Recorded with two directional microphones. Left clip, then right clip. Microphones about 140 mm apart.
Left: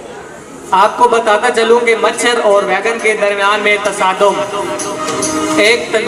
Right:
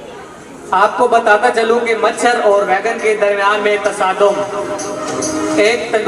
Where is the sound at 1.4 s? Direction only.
25° left (ahead or behind).